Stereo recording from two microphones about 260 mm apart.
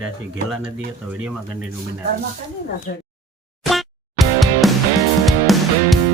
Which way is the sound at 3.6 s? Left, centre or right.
Centre.